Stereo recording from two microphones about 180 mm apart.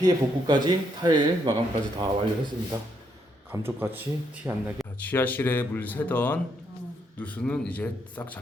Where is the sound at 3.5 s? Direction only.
10° right (ahead or behind).